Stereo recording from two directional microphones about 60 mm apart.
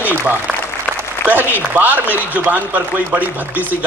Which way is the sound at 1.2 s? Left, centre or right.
Right.